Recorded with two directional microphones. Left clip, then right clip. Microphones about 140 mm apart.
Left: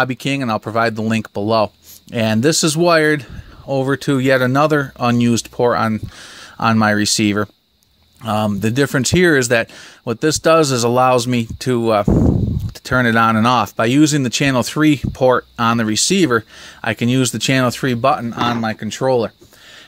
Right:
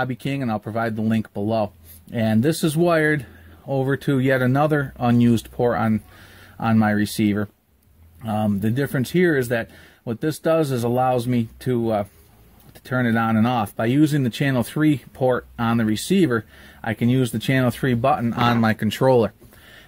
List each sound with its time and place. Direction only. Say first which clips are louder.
0.0 s speech: left 7 dB; 35° left (ahead or behind)
18.2 s speech: left 1 dB; centre (ahead or behind)